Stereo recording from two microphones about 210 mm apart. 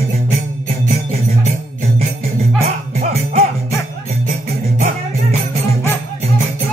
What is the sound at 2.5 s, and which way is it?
Music, 30° right (ahead or behind).